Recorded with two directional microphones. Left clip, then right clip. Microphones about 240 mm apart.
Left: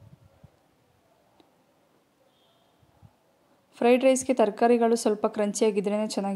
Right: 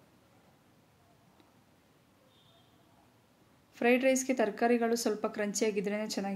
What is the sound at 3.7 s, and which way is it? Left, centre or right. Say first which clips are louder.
Speech: left 7 dB; left.